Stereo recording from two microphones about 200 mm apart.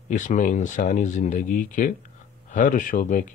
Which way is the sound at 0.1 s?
40° left (ahead or behind).